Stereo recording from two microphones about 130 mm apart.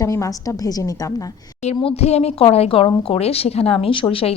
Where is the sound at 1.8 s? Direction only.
55° left (ahead or behind).